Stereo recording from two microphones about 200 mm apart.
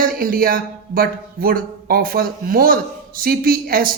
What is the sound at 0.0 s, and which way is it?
A man's voice, 45° right (ahead or behind).